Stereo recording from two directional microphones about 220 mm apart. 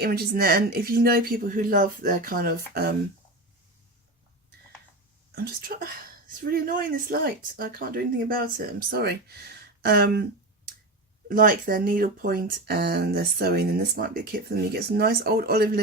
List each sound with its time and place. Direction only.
0.0 s speech: 45° right (ahead or behind)
5.3 s speech: 45° right (ahead or behind)
11.3 s speech: 40° right (ahead or behind)